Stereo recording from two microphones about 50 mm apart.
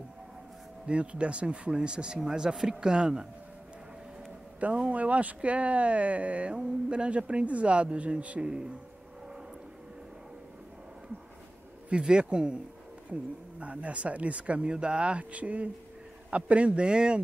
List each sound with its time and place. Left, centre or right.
0.8 s speech: right
4.6 s speech: right
11.9 s speech: centre